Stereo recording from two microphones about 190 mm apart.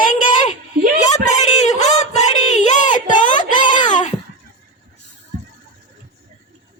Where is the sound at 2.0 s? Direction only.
40° left (ahead or behind).